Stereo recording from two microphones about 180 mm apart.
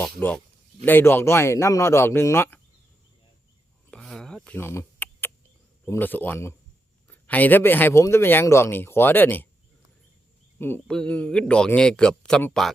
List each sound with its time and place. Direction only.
0.2 s speech: 10° left (ahead or behind)
3.9 s a sound: 5° left (ahead or behind)
5.8 s speech: 10° left (ahead or behind)
10.6 s speech: 10° left (ahead or behind)